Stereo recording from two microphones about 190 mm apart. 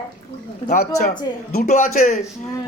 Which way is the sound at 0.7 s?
40° left (ahead or behind).